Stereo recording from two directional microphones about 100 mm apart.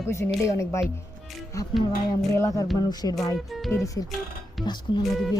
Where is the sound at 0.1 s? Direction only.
30° left (ahead or behind).